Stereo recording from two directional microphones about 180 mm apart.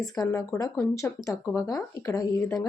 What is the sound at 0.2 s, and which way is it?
Speech, 20° left (ahead or behind).